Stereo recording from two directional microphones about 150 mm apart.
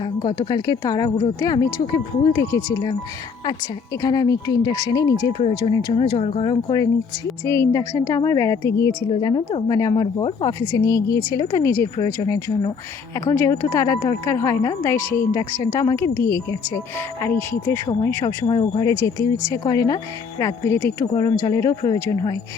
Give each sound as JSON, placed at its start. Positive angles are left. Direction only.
{"t": 0.0, "sound": "speech", "side_deg": 30}
{"t": 4.0, "sound": "speech", "side_deg": 25}
{"t": 5.6, "sound": "speech", "side_deg": 35}
{"t": 7.4, "sound": "speech", "side_deg": 20}
{"t": 9.0, "sound": "speech", "side_deg": 35}
{"t": 14.9, "sound": "a woman's voice", "side_deg": 15}
{"t": 18.4, "sound": "speech", "side_deg": 35}
{"t": 18.9, "sound": "speech", "side_deg": 20}
{"t": 21.1, "sound": "speech", "side_deg": 25}